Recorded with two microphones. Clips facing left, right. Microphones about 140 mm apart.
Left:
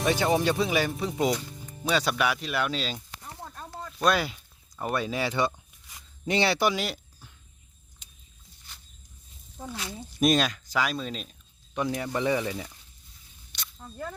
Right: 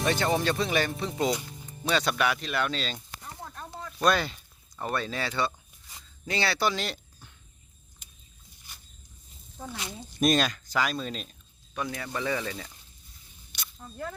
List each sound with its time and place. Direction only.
0.0 s speech: 5° left (ahead or behind)
3.4 s a sound: 5° left (ahead or behind)
3.8 s speech: centre (ahead or behind)
9.7 s speech: 20° right (ahead or behind)
10.2 s speech: centre (ahead or behind)
11.7 s speech: 20° left (ahead or behind)
13.5 s a sound: 5° right (ahead or behind)